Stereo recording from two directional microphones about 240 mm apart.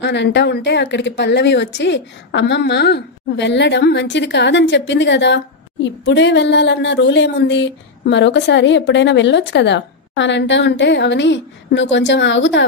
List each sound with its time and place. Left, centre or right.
0.0 s speech: left